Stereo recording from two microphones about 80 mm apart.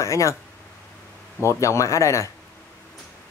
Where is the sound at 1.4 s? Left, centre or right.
Left.